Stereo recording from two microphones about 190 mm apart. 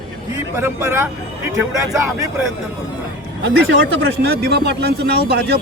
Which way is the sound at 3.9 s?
60° right (ahead or behind).